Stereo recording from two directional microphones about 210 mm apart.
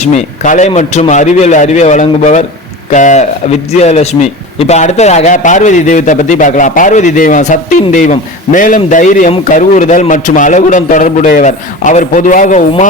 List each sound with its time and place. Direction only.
0.0 s a man's voice: 35° left (ahead or behind)